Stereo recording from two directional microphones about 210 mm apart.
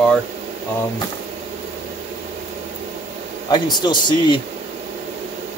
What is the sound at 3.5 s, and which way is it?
Speech, 20° left (ahead or behind).